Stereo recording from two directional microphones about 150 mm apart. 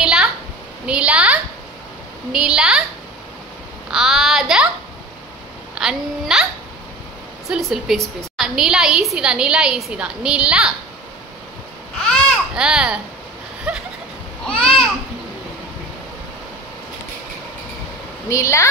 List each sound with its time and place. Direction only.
0.0 s a sound: 5° right (ahead or behind)
2.3 s a woman's voice: 5° right (ahead or behind)
3.9 s speech: centre (ahead or behind)
5.8 s a woman's voice: 5° right (ahead or behind)
7.4 s a woman's voice: 5° right (ahead or behind)
12.1 s baby cry: 5° right (ahead or behind)
13.7 s a sound: 5° right (ahead or behind)
14.4 s babbling: 5° left (ahead or behind)
18.3 s speech: 20° left (ahead or behind)